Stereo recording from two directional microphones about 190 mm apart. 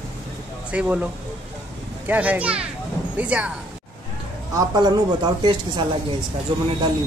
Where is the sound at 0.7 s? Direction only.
5° right (ahead or behind).